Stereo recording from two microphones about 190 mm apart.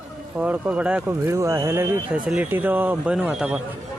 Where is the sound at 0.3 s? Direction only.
5° right (ahead or behind).